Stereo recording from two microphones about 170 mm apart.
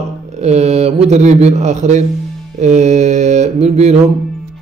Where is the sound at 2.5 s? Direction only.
45° right (ahead or behind).